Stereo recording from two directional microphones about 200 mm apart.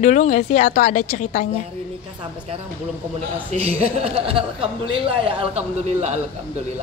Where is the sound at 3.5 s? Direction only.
35° right (ahead or behind).